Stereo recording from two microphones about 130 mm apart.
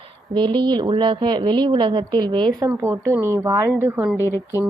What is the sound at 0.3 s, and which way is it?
A woman's voice, 35° right (ahead or behind).